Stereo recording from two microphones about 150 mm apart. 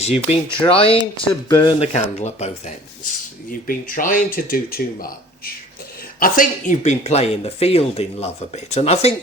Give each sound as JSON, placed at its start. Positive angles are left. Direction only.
{"t": 0.0, "sound": "speech", "side_deg": 40}
{"t": 1.3, "sound": "speech", "side_deg": 25}
{"t": 1.8, "sound": "speech", "side_deg": 45}
{"t": 3.5, "sound": "speech", "side_deg": 70}
{"t": 6.1, "sound": "speech", "side_deg": 70}